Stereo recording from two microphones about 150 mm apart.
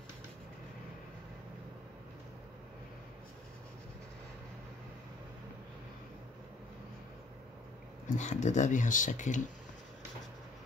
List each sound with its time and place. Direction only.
8.2 s speech: 50° left (ahead or behind)